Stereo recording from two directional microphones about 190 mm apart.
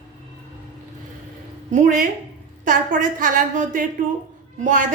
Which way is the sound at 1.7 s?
40° right (ahead or behind).